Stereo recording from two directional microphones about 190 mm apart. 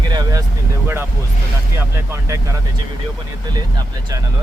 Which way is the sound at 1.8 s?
15° right (ahead or behind).